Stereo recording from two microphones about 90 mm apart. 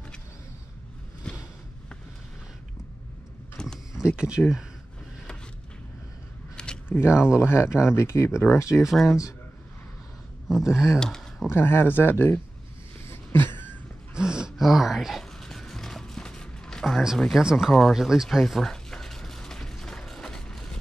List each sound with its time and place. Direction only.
3.6 s a sound: 10° left (ahead or behind)
4.2 s speech: 10° right (ahead or behind)
6.5 s a sound: 10° left (ahead or behind)
6.9 s speech: 25° left (ahead or behind)
8.9 s speech: centre (ahead or behind)
10.5 s speech: 5° right (ahead or behind)
11.0 s speech: 5° left (ahead or behind)
11.5 s speech: 25° left (ahead or behind)
13.1 s a sound: 25° left (ahead or behind)
14.1 s gasp: 10° right (ahead or behind); by 16.8 s 10° left (ahead or behind)
16.8 s speech: 5° right (ahead or behind)
17.4 s a sound: 5° right (ahead or behind)